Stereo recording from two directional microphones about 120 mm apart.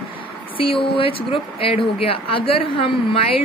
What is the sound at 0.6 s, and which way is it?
A woman's voice, 50° left (ahead or behind).